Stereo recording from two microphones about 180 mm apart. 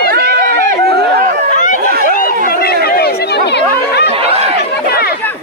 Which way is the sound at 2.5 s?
55° left (ahead or behind).